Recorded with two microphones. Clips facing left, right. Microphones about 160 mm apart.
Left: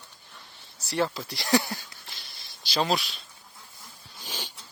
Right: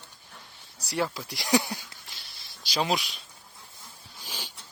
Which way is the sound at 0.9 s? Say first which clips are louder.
Left 2 dB; 5° right (ahead or behind).